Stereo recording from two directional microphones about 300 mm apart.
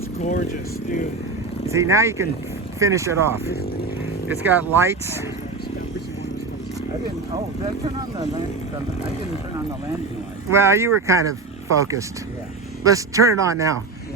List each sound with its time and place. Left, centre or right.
0.2 s speech: left
1.7 s speech: centre
10.5 s speech: centre